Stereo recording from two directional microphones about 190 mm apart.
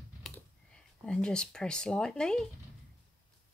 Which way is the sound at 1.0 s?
5° left (ahead or behind).